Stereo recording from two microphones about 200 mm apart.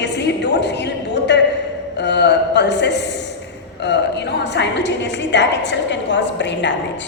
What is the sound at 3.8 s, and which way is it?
A woman's voice, 60° left (ahead or behind).